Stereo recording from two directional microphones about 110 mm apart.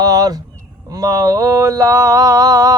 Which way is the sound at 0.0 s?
35° right (ahead or behind).